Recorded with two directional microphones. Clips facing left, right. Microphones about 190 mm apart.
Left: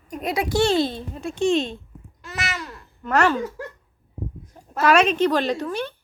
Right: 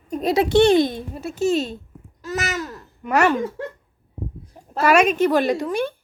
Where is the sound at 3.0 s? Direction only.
10° right (ahead or behind).